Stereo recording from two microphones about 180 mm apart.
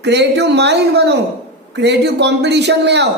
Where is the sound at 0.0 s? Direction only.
70° right (ahead or behind).